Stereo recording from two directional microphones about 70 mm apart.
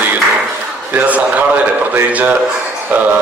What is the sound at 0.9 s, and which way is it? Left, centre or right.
A man's voice, right.